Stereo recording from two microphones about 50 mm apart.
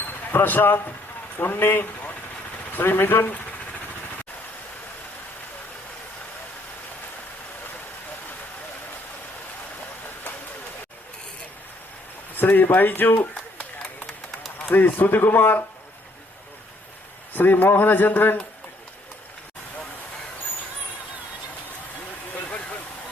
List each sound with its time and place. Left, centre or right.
0.3 s a man's voice: left
12.4 s a man's voice: left
13.7 s a sound: centre
14.6 s a man's voice: left
17.3 s a man's voice: left